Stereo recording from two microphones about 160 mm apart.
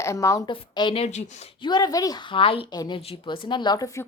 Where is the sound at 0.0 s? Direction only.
20° left (ahead or behind).